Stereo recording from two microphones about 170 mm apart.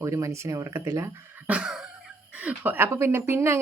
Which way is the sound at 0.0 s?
15° right (ahead or behind).